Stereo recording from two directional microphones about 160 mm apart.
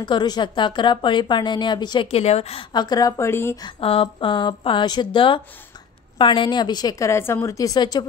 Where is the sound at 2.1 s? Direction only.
40° left (ahead or behind).